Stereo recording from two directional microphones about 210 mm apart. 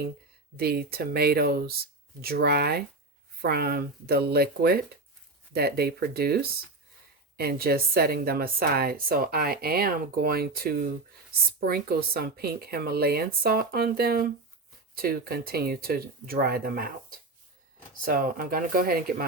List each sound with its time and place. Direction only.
0.5 s a woman's voice: 50° right (ahead or behind)